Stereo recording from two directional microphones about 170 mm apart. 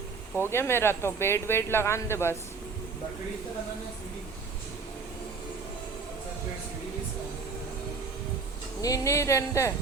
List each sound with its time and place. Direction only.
0.3 s speech: 15° left (ahead or behind)
8.8 s speech: 20° left (ahead or behind)